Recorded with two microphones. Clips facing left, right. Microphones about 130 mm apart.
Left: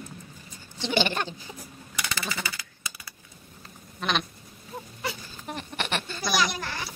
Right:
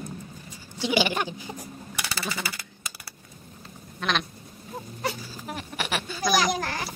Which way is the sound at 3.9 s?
Centre (ahead or behind).